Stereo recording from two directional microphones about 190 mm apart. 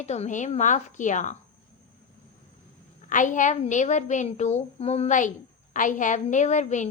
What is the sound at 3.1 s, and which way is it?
A woman's voice, 40° left (ahead or behind).